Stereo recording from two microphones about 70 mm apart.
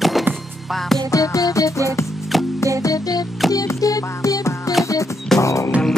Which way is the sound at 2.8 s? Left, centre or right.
Left.